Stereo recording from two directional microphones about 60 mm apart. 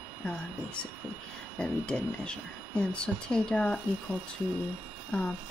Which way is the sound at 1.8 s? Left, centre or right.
Centre.